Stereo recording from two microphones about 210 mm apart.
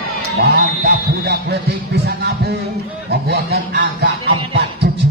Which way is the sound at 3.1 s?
50° right (ahead or behind).